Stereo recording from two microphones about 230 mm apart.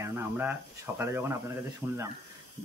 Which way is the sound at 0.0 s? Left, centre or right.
Centre.